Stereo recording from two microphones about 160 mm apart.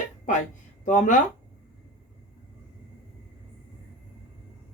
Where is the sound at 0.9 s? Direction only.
50° left (ahead or behind).